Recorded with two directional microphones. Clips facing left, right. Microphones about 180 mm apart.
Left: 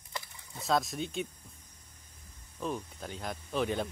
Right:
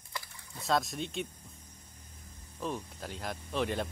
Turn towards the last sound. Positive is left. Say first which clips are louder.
# left 1 dB
turn(degrees=0)  # may be behind; listen again after turning